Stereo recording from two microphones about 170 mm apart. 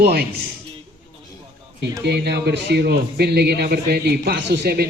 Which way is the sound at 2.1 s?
80° right.